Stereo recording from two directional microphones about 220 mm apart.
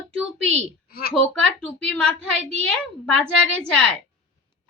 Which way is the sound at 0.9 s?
40° left (ahead or behind).